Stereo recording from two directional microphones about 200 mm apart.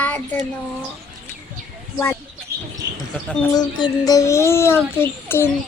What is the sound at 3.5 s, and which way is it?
A child's voice, 20° left (ahead or behind).